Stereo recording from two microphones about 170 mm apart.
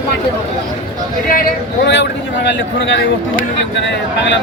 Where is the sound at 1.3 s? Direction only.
60° left (ahead or behind); by 3.0 s 90° left.